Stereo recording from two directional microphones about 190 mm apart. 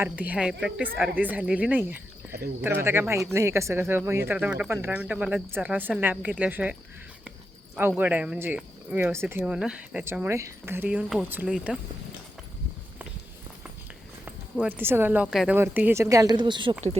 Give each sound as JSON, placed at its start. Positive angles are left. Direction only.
{"t": 0.0, "sound": "speech", "side_deg": -10}
{"t": 7.8, "sound": "speech", "side_deg": -10}
{"t": 14.3, "sound": "speech", "side_deg": -5}